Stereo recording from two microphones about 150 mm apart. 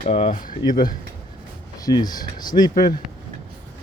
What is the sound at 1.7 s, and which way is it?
Speech, 25° left (ahead or behind).